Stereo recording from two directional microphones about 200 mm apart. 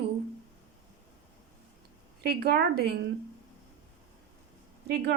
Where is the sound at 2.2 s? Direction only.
50° right (ahead or behind).